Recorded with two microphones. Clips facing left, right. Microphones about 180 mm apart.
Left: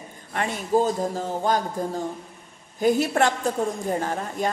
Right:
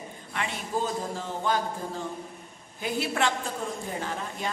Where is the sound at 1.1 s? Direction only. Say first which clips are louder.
Left 5 dB; 40° left (ahead or behind).